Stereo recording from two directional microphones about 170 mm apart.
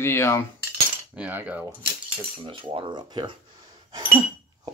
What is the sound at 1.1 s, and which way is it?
Speech, 10° right (ahead or behind).